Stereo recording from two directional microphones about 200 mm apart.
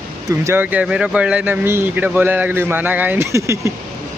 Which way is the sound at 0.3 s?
10° right (ahead or behind).